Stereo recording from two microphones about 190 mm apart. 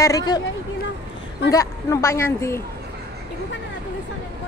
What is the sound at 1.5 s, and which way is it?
Speech, 15° left (ahead or behind).